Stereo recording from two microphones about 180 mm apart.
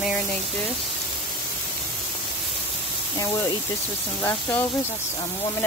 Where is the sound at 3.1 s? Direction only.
20° left (ahead or behind).